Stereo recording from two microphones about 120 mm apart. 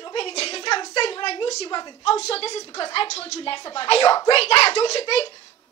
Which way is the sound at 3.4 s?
45° left (ahead or behind).